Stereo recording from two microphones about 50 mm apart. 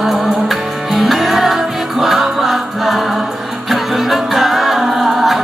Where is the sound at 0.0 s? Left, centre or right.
Centre.